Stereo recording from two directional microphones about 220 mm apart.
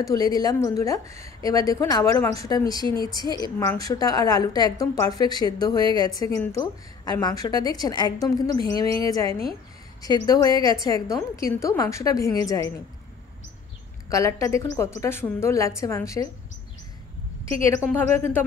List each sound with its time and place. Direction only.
0.0 s a woman's voice: 15° left (ahead or behind)
14.0 s a woman's voice: 15° left (ahead or behind)
17.6 s a woman's voice: 10° left (ahead or behind)